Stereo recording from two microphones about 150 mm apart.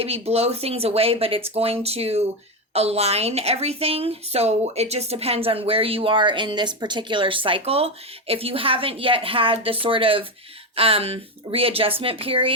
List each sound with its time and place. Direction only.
0.0 s speech: 40° right (ahead or behind)